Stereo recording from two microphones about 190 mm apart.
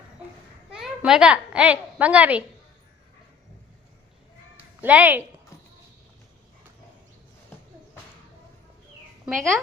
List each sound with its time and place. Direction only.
0.7 s a child's voice: 5° right (ahead or behind)
4.8 s a woman's voice: 10° right (ahead or behind)
9.3 s speech: centre (ahead or behind)